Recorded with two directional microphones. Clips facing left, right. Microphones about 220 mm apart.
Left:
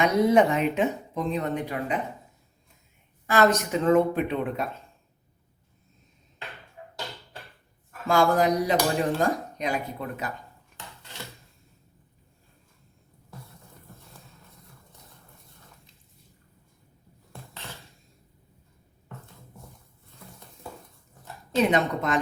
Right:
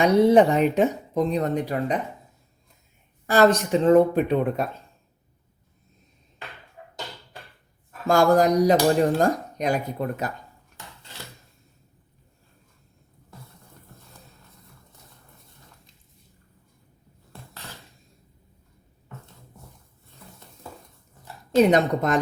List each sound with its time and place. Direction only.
0.0 s speech: 30° right (ahead or behind)
3.2 s speech: 35° right (ahead or behind)
8.0 s speech: 45° right (ahead or behind)
21.5 s speech: 40° right (ahead or behind)